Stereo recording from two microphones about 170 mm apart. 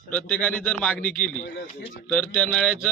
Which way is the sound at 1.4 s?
75° left (ahead or behind).